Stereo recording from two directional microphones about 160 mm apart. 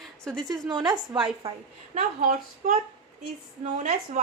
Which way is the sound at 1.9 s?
55° right (ahead or behind).